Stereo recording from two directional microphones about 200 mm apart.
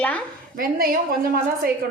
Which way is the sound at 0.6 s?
45° right (ahead or behind).